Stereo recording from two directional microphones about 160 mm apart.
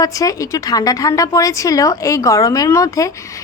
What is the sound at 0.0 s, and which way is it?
A woman's voice, 20° left (ahead or behind).